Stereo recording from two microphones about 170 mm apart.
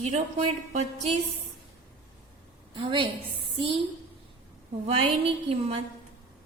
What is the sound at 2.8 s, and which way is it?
A woman's voice, 30° right (ahead or behind).